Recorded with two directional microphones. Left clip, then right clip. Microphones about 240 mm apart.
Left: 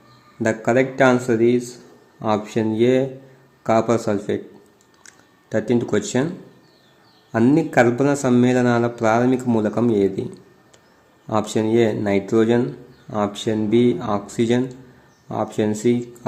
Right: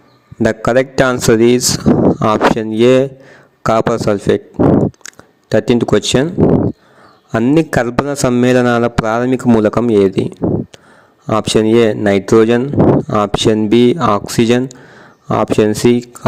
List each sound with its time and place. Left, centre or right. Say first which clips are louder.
0.4 s speech: right 6 dB; right
4.9 s a sound: right 19 dB; right
7.3 s speech: right 6 dB; right
11.3 s speech: right 8 dB; right